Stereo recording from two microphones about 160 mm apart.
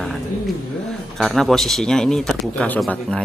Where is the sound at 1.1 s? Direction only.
Centre (ahead or behind).